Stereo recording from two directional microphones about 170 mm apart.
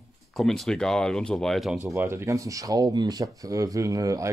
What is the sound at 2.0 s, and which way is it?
Speech, 15° right (ahead or behind).